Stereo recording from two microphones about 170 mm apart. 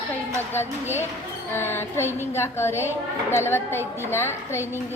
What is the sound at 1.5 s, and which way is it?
A woman's voice, 15° left (ahead or behind).